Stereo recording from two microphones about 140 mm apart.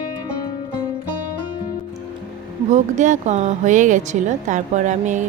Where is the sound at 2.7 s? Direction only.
60° right (ahead or behind).